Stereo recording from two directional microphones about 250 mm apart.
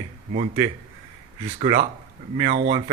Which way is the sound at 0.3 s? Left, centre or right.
Right.